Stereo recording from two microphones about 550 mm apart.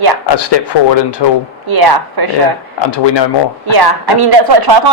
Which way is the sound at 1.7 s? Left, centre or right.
Right.